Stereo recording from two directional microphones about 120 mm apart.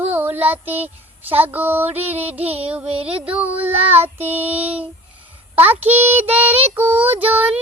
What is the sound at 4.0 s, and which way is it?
Child singing, 60° right (ahead or behind).